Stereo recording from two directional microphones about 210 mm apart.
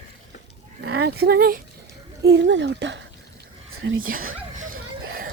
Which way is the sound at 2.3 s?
55° right (ahead or behind).